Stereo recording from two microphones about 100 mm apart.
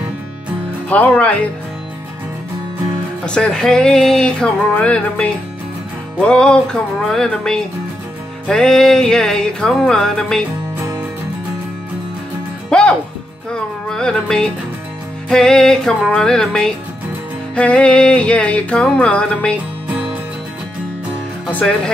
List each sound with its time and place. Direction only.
0.8 s music: 15° left (ahead or behind)
3.3 s music: 10° left (ahead or behind)
12.6 s music: 10° left (ahead or behind)
21.5 s music: 10° left (ahead or behind)